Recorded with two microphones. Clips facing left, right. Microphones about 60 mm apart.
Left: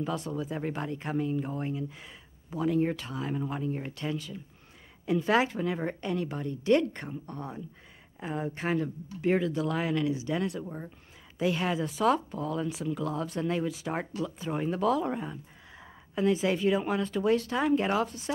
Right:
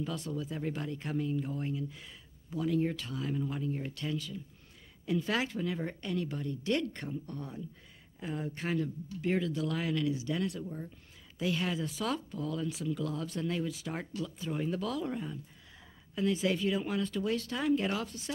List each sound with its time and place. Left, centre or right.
0.0 s speech: centre
10.6 s speech: left